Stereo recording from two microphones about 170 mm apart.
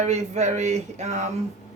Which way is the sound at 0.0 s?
40° right (ahead or behind).